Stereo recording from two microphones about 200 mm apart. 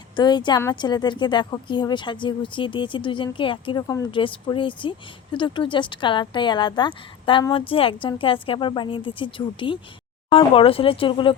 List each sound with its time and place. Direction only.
0.2 s speech: 20° left (ahead or behind)